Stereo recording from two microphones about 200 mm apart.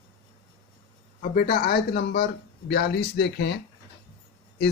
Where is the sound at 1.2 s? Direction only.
45° left (ahead or behind).